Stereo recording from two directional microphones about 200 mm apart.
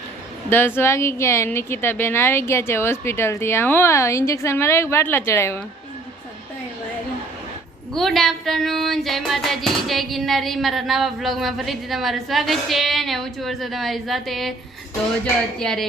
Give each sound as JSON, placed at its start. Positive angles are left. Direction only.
{"t": 0.8, "sound": "a woman's voice", "side_deg": 15}
{"t": 7.9, "sound": "music", "side_deg": 0}